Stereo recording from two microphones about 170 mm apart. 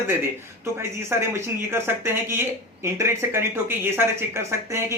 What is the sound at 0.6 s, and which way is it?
Speech, 15° right (ahead or behind).